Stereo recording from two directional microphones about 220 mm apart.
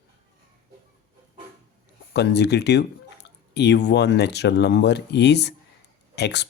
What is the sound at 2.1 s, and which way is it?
Speech, 50° left (ahead or behind).